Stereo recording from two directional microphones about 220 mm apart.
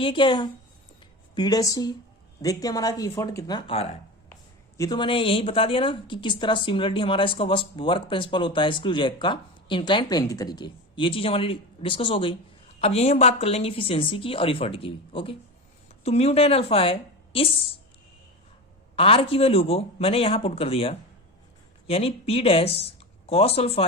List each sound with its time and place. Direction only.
0.0 s speech: 20° left (ahead or behind)
18.9 s speech: 25° left (ahead or behind)